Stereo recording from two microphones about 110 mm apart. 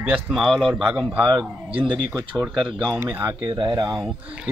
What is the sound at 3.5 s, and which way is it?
Speech, 40° right (ahead or behind).